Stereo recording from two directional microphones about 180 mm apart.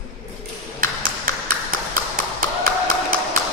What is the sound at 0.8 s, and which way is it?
Tap, 50° right (ahead or behind).